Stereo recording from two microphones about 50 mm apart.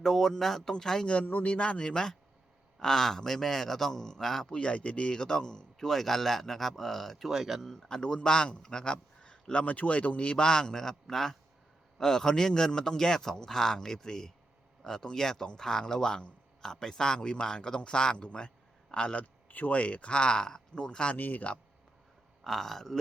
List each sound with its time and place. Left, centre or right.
0.0 s speech: centre
1.1 s speech: left; by 4.4 s centre
4.4 s speech: left; by 7.3 s centre
7.3 s speech: centre
7.9 s speech: centre
19.5 s speech: left
21.2 s speech: left
22.4 s speech: centre